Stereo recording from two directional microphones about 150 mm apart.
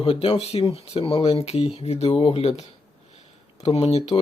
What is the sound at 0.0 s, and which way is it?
Speech, 40° left (ahead or behind).